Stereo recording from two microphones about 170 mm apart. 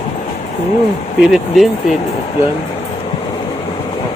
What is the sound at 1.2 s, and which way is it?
Speech, centre (ahead or behind).